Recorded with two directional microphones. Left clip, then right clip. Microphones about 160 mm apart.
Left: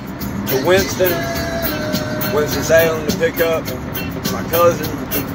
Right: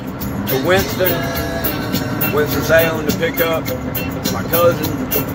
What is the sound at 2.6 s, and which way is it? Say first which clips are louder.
Speech: left 1 dB; 20° right (ahead or behind).